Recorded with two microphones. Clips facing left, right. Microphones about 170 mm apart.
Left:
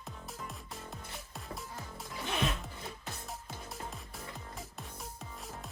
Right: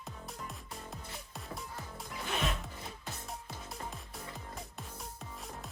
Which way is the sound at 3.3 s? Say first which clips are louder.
Even; centre (ahead or behind).